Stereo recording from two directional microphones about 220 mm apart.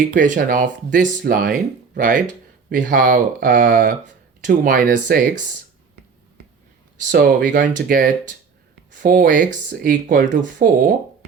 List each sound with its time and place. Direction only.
0.2 s speech: 40° right (ahead or behind)
7.1 s speech: 50° right (ahead or behind)
7.4 s speech: 35° right (ahead or behind)